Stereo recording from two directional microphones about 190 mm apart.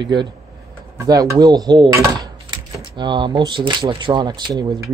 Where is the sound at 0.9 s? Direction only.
20° right (ahead or behind).